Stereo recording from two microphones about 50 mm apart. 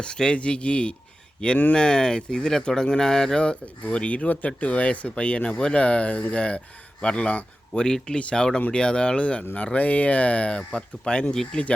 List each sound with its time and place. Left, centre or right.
0.0 s speech: centre